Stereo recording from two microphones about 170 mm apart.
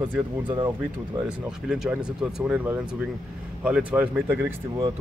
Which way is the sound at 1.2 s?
5° right (ahead or behind).